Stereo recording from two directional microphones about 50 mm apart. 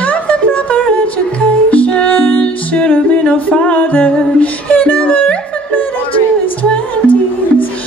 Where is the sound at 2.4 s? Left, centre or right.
Left.